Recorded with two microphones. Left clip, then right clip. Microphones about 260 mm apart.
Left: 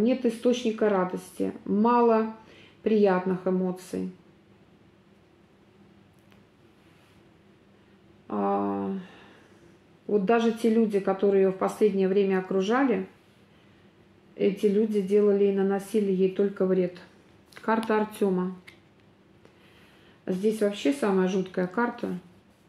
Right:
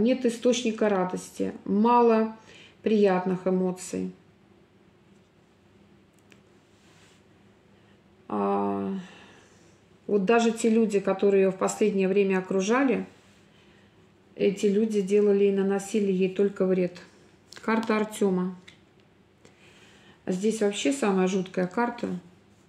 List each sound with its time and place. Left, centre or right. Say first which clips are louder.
0.0 s speech: right 1 dB; right
8.3 s speech: even; right
10.1 s speech: right 1 dB; right
14.3 s speech: even; right
20.2 s speech: even; right